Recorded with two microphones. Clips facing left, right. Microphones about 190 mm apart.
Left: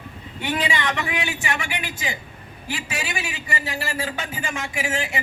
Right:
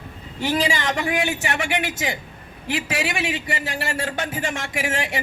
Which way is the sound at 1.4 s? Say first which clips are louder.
Right 4 dB; 70° right (ahead or behind).